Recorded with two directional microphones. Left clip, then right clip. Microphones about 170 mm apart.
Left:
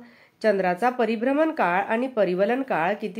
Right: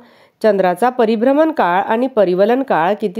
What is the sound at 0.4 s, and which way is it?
A woman's voice, 55° right (ahead or behind).